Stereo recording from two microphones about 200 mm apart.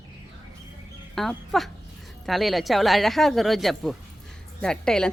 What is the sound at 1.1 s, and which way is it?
A woman's voice, centre (ahead or behind).